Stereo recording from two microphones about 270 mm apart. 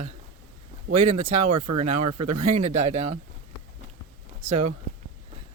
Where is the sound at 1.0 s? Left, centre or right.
Right.